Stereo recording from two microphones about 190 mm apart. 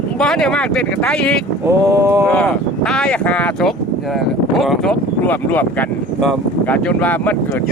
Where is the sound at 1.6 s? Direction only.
15° right (ahead or behind).